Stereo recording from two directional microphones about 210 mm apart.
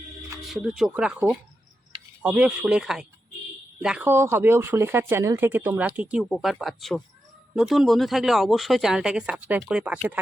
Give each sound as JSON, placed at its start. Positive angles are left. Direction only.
{"t": 0.4, "sound": "speech", "side_deg": 0}